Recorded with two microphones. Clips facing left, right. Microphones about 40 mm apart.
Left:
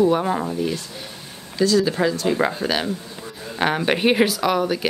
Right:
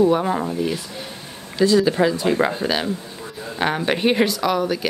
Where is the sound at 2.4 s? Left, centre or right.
Centre.